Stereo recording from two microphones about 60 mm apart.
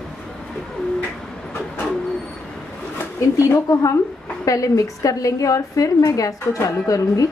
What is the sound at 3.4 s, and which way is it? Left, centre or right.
A woman's voice, left.